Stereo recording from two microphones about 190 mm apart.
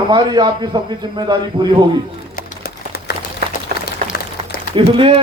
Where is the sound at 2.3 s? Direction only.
50° left (ahead or behind).